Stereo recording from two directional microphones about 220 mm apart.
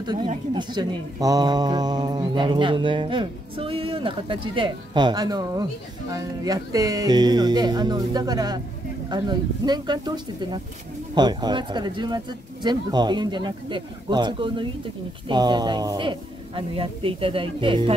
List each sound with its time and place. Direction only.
0.0 s speech: 20° right (ahead or behind)